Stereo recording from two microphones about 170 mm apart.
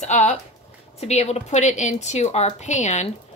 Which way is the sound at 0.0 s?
45° left (ahead or behind).